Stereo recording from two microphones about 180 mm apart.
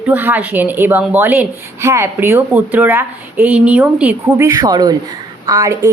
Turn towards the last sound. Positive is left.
turn(degrees=-20)  # may be behind; listen again after turning